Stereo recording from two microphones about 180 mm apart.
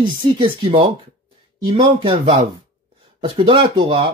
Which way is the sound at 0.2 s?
30° right (ahead or behind).